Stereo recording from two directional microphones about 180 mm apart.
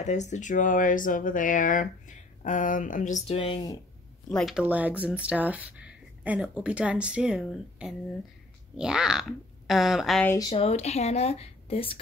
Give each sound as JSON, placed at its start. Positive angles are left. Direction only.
{"t": 0.0, "sound": "speech", "side_deg": 40}
{"t": 3.3, "sound": "speech", "side_deg": 30}
{"t": 4.3, "sound": "a woman's voice", "side_deg": 0}
{"t": 10.2, "sound": "speech", "side_deg": 20}
{"t": 10.5, "sound": "speech", "side_deg": 35}